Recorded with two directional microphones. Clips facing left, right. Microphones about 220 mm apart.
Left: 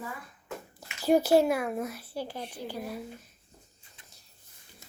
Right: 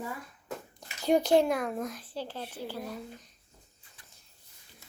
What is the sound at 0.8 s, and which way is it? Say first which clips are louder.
Speech: left 2 dB; 5° left (ahead or behind).